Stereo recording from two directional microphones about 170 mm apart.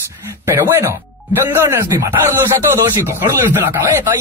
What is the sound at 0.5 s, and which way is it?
Speech, 15° right (ahead or behind).